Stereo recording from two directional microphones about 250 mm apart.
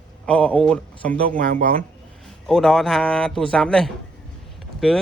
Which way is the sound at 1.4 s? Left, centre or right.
Right.